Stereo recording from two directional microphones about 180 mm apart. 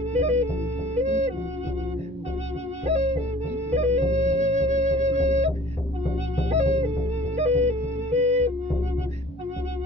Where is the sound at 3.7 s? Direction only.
40° right (ahead or behind).